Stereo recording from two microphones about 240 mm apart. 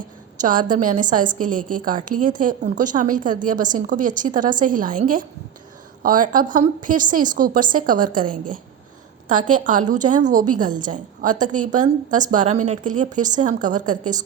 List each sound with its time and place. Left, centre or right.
0.4 s a woman's voice: right
1.5 s a woman's voice: right
1.8 s a woman's voice: right
6.0 s a woman's voice: right
9.3 s a woman's voice: right
11.4 s a woman's voice: right
11.7 s a woman's voice: right